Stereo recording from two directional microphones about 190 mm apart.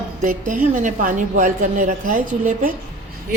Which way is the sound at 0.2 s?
45° right (ahead or behind).